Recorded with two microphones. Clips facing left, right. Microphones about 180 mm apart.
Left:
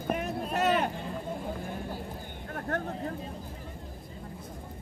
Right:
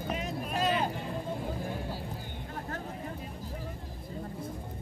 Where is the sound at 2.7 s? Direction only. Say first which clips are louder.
Left 9 dB; 65° left (ahead or behind).